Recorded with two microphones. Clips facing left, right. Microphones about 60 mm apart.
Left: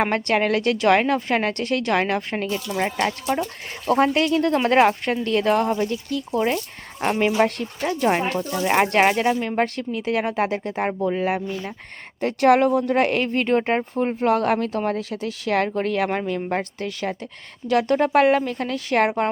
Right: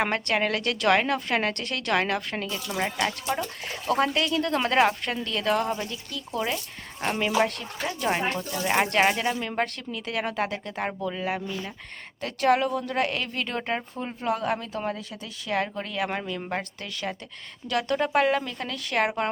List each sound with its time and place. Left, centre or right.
0.0 s a woman's voice: left
3.8 s a woman's voice: left
12.2 s speech: left
12.9 s a woman's voice: left
14.3 s speech: left
17.7 s a woman's voice: left